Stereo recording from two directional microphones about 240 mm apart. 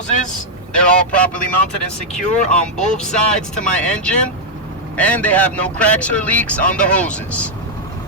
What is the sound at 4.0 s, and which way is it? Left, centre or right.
Speech, centre.